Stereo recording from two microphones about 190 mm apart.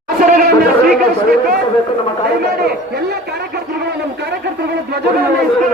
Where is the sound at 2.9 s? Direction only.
55° right (ahead or behind).